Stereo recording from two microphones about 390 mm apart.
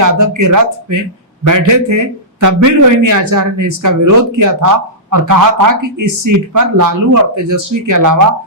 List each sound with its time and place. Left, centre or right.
0.0 s a man's voice: right